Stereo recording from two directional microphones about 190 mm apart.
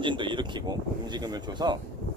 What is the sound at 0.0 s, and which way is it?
Speech, 25° right (ahead or behind).